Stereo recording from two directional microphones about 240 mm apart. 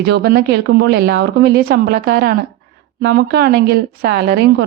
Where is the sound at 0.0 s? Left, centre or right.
Right.